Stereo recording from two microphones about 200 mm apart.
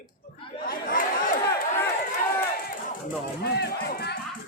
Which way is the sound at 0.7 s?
45° left (ahead or behind).